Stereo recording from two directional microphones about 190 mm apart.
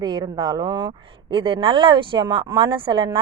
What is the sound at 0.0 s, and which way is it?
A woman's voice, 20° right (ahead or behind).